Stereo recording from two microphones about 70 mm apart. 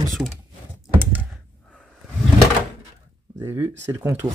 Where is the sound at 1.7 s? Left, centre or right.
Centre.